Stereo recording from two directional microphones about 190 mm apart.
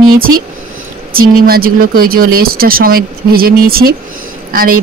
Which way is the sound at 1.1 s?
50° right (ahead or behind).